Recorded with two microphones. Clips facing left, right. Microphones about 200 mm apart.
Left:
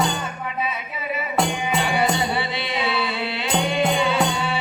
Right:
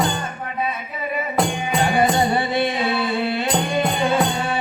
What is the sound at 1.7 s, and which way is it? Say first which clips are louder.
Music: right 5 dB; 45° right (ahead or behind).